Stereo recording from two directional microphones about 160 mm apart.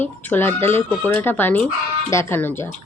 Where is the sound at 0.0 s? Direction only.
10° left (ahead or behind).